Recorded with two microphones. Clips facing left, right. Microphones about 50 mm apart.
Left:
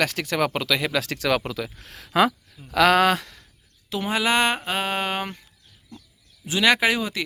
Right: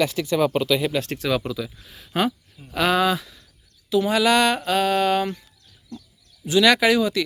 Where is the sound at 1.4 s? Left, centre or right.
Left.